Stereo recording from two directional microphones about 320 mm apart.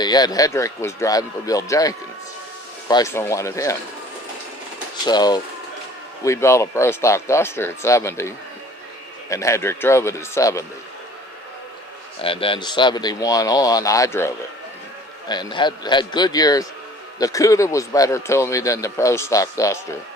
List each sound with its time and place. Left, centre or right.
0.0 s a man's voice: centre
5.0 s a man's voice: centre
9.3 s a man's voice: centre
12.2 s a man's voice: centre